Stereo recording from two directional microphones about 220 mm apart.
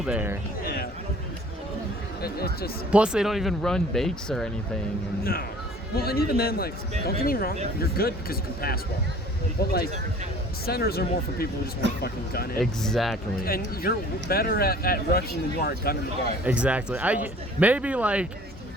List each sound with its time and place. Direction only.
0.0 s speech: 5° right (ahead or behind)
0.6 s a sound: 40° left (ahead or behind)
2.2 s speech: 45° left (ahead or behind)
2.9 s speech: 5° right (ahead or behind)
5.2 s speech: 45° left (ahead or behind)
12.5 s speech: centre (ahead or behind)
13.4 s speech: 45° left (ahead or behind)
16.4 s speech: 5° right (ahead or behind)